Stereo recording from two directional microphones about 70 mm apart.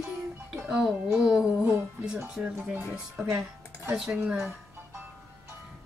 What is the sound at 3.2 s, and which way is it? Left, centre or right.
Speech, centre.